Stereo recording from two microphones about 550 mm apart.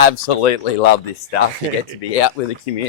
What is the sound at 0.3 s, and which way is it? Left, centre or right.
Speech, left.